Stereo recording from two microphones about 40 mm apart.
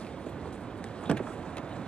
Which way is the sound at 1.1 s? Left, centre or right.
Left.